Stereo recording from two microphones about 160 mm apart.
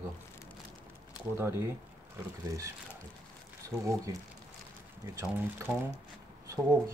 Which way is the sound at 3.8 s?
20° right (ahead or behind).